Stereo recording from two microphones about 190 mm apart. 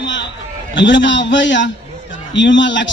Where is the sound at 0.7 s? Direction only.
70° left (ahead or behind).